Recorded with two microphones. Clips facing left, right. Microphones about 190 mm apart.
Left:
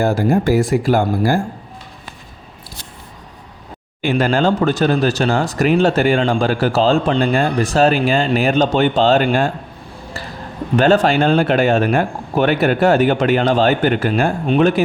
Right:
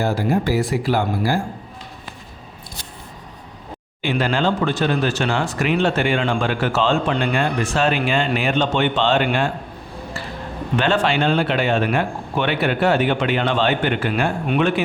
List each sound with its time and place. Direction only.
0.0 s speech: 45° left (ahead or behind)
4.0 s speech: 45° left (ahead or behind)
10.8 s speech: 40° left (ahead or behind)